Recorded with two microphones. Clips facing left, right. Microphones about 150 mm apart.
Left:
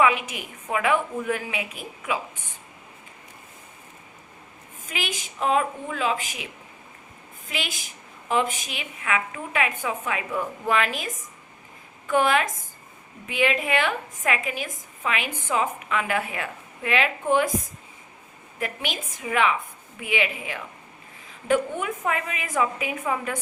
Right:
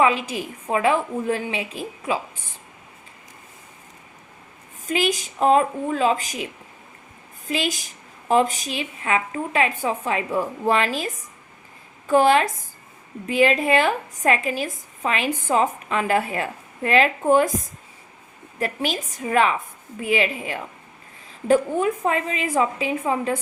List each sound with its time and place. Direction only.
0.0 s a woman's voice: 30° right (ahead or behind)
4.9 s a woman's voice: 40° right (ahead or behind)
18.6 s a woman's voice: 35° right (ahead or behind)